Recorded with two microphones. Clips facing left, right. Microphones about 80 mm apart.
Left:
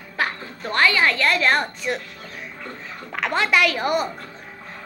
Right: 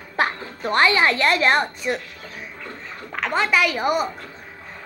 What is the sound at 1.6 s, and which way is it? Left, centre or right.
Speech, centre.